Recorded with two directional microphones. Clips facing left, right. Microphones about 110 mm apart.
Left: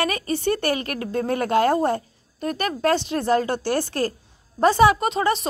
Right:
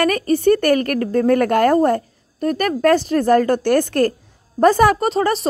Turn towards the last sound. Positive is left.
turn(degrees=-40)  # may be behind; listen again after turning